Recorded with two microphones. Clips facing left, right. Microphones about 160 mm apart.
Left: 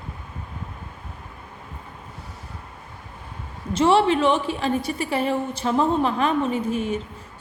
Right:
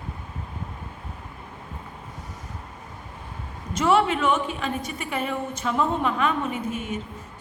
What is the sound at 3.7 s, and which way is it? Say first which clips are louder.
A woman's voice: left 3 dB; 30° left (ahead or behind).